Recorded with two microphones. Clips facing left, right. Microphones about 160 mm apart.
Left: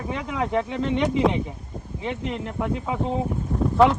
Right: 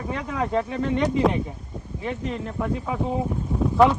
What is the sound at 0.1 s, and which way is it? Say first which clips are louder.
Speech: even; 15° left (ahead or behind).